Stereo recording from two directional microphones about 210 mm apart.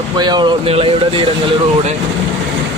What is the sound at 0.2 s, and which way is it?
Speech, 20° right (ahead or behind).